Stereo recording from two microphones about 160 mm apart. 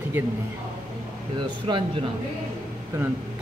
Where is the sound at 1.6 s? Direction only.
30° right (ahead or behind).